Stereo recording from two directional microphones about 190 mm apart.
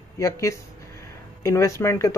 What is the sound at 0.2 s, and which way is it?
Speech, 15° left (ahead or behind).